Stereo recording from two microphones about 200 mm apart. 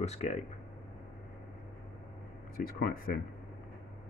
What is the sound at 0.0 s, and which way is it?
Speech, 35° left (ahead or behind).